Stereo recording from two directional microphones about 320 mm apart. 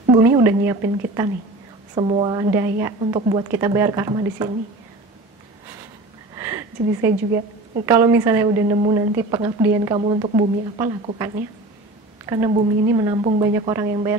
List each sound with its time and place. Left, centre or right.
0.1 s a woman's voice: centre
6.3 s a sound: centre
7.8 s a woman's voice: centre